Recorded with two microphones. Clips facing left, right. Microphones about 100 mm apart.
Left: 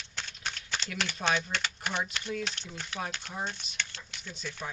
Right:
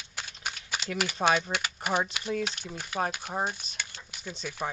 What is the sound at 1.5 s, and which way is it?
Speech, 45° right (ahead or behind).